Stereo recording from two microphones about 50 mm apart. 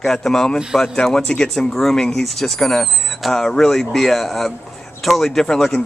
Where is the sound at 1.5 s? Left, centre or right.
Centre.